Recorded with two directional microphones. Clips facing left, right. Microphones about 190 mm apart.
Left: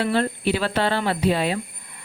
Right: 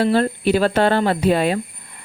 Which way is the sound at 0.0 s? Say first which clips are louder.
Right 5 dB; 40° right (ahead or behind).